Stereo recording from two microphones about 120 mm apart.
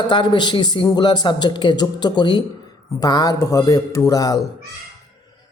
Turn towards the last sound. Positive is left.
turn(degrees=30)  # may be behind; listen again after turning